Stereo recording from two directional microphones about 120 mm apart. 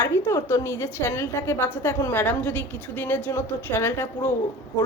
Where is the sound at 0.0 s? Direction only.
20° left (ahead or behind).